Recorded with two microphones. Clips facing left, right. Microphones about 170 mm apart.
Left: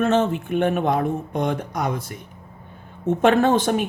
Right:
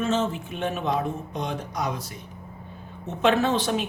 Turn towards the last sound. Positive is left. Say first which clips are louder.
# left 5 dB
turn(degrees=50)  # may be behind; listen again after turning